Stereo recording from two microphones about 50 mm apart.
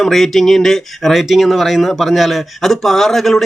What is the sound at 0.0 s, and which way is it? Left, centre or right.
Speech, centre.